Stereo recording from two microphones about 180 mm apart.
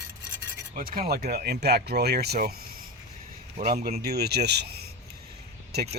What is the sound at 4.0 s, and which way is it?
Speech, 60° right (ahead or behind).